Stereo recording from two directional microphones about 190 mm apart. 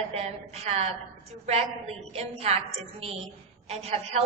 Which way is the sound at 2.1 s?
35° right (ahead or behind).